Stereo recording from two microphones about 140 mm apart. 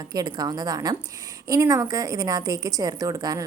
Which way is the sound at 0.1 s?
25° right (ahead or behind).